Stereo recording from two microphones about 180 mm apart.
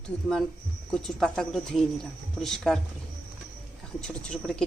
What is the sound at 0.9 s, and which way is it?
A woman's voice, 5° left (ahead or behind).